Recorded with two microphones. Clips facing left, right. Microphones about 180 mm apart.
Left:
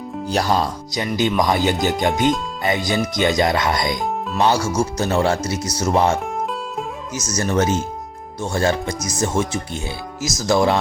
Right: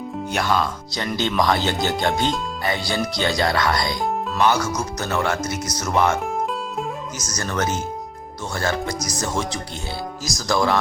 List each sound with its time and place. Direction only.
0.3 s speech: 35° left (ahead or behind)
0.9 s speech: 15° left (ahead or behind)
4.4 s speech: 30° left (ahead or behind)
7.3 s speech: 20° left (ahead or behind)